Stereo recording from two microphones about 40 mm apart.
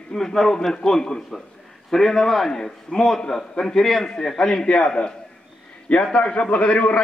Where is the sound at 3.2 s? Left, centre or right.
Centre.